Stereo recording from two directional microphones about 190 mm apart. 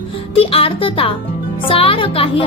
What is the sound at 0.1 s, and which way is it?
A woman's voice, 30° left (ahead or behind).